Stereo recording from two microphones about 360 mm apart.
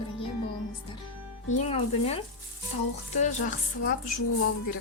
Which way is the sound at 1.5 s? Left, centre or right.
Centre.